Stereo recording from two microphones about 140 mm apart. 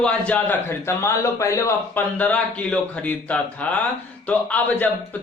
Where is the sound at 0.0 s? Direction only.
10° left (ahead or behind).